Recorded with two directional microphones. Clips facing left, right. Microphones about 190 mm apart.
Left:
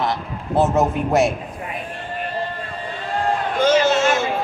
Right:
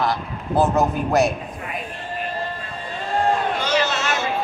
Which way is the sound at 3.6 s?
50° left (ahead or behind).